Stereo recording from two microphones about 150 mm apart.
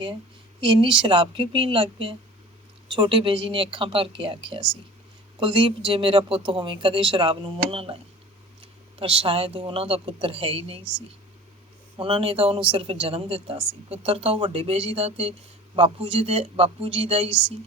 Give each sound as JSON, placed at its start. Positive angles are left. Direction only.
{"t": 0.6, "sound": "speech", "side_deg": -35}
{"t": 9.0, "sound": "speech", "side_deg": -40}
{"t": 11.9, "sound": "speech", "side_deg": -35}